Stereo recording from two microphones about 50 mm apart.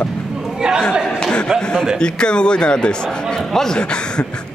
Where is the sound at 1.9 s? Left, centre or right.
Centre.